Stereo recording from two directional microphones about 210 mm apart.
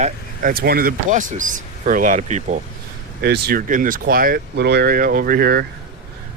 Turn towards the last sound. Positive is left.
turn(degrees=-45)  # may be behind; listen again after turning